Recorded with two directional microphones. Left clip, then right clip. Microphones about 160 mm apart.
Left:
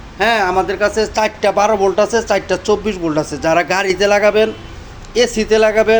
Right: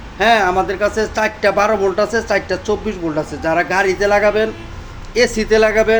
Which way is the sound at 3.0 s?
40° left (ahead or behind).